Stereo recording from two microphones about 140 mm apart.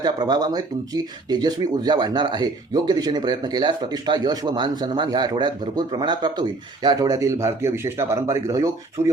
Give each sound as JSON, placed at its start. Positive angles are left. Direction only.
{"t": 0.0, "sound": "speech", "side_deg": -30}